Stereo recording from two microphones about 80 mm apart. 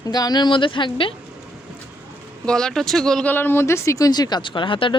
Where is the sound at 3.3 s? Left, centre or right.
Left.